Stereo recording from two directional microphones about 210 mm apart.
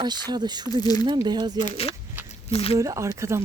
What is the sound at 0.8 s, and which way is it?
Speech, 20° left (ahead or behind).